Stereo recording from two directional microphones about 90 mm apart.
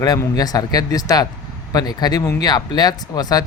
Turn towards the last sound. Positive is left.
turn(degrees=45)  # may be behind; listen again after turning